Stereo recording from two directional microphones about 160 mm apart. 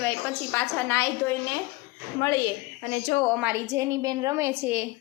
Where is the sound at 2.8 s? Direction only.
55° left (ahead or behind).